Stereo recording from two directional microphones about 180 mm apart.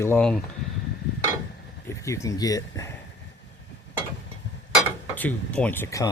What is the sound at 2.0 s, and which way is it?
Speech, 15° left (ahead or behind).